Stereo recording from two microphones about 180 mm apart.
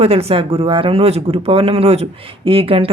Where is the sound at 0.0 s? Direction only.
35° right (ahead or behind).